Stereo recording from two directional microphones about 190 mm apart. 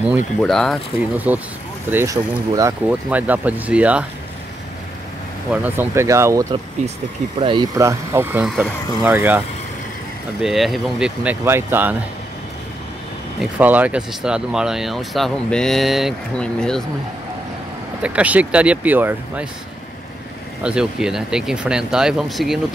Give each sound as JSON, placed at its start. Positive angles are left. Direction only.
{"t": 0.4, "sound": "speech", "side_deg": 5}
{"t": 1.1, "sound": "speech", "side_deg": -10}
{"t": 5.5, "sound": "speech", "side_deg": -10}
{"t": 7.3, "sound": "speech", "side_deg": -25}
{"t": 10.4, "sound": "speech", "side_deg": 0}
{"t": 13.4, "sound": "speech", "side_deg": -10}
{"t": 18.0, "sound": "speech", "side_deg": -5}
{"t": 20.6, "sound": "speech", "side_deg": -5}